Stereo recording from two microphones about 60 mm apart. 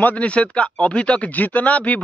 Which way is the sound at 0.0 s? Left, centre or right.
Left.